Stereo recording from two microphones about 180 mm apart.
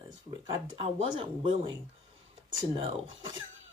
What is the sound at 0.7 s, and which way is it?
Speech, 30° right (ahead or behind).